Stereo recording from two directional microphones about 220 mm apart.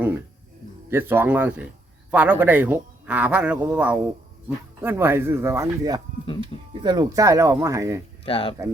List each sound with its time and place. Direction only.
0.9 s a man's voice: 10° right (ahead or behind)
8.2 s speech: 25° left (ahead or behind)